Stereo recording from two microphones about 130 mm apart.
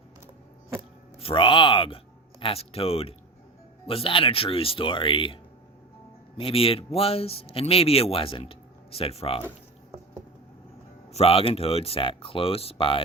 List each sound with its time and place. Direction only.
1.2 s speech: 45° left (ahead or behind)
11.1 s speech: 50° left (ahead or behind)